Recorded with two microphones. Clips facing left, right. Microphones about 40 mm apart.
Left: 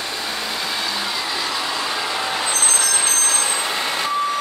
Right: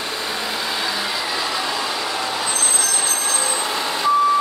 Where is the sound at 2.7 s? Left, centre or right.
Left.